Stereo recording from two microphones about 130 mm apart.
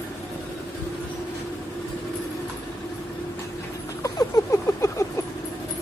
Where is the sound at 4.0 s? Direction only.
25° left (ahead or behind).